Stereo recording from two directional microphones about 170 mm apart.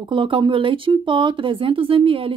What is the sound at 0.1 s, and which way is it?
Speech, 30° right (ahead or behind).